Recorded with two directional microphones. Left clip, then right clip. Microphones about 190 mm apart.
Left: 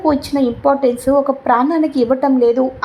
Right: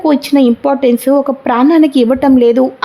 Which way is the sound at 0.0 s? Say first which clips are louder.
Right 5 dB; 35° right (ahead or behind).